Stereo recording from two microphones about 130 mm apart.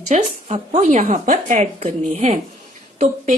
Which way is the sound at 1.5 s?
55° right (ahead or behind).